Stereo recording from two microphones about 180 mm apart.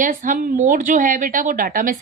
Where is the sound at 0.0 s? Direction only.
45° right (ahead or behind).